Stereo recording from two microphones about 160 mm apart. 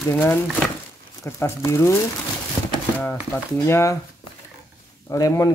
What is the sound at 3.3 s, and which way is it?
Speech, 15° left (ahead or behind).